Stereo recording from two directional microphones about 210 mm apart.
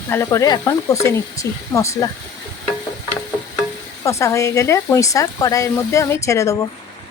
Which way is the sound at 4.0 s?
15° left (ahead or behind).